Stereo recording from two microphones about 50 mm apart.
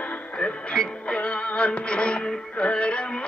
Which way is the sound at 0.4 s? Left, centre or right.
Centre.